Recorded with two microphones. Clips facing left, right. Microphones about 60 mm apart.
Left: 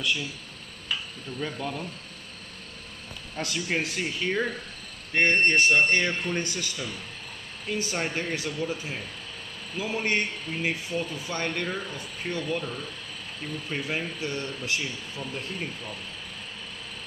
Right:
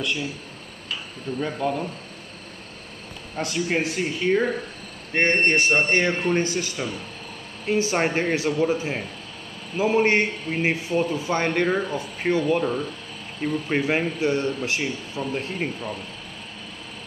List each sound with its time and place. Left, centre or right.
1.4 s speech: right
3.3 s speech: right
7.9 s speech: right
8.6 s speech: right
11.5 s speech: right